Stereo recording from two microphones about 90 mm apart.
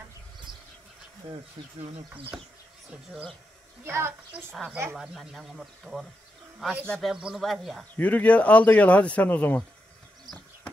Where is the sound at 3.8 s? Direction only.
25° right (ahead or behind).